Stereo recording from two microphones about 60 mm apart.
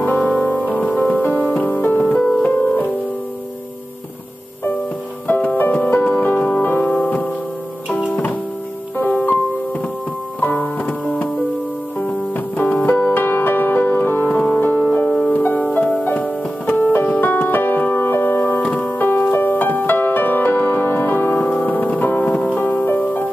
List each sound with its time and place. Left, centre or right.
0.0 s music: left
1.7 s music: left
2.1 s music: centre
2.6 s music: left
5.6 s music: left
8.1 s music: left
10.4 s keyboard: left
12.5 s music: left
18.6 s music: left